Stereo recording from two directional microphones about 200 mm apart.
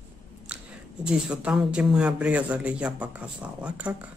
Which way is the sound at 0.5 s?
5° right (ahead or behind).